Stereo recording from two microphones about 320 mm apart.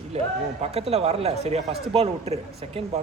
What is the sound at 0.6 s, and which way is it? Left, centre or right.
A man's voice, centre.